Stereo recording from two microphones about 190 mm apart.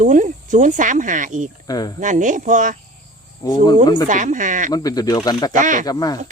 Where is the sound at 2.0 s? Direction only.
40° right (ahead or behind).